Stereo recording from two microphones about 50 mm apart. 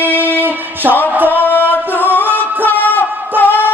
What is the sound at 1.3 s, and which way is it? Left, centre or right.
Music, left.